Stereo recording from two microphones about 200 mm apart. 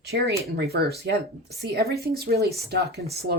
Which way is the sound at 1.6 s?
50° right (ahead or behind).